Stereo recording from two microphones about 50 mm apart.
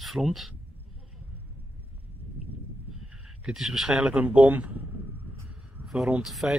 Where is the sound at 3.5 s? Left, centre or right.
Centre.